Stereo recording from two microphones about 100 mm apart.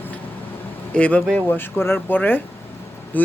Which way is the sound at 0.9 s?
15° left (ahead or behind).